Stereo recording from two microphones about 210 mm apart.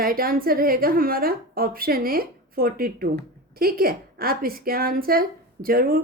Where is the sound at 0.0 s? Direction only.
45° right (ahead or behind).